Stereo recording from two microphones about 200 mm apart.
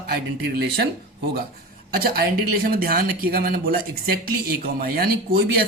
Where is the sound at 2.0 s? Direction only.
50° right (ahead or behind).